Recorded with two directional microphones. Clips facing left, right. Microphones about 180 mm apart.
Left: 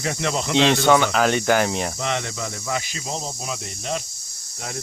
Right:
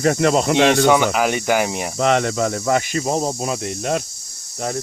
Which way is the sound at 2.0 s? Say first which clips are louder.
Right 9 dB; 55° right (ahead or behind).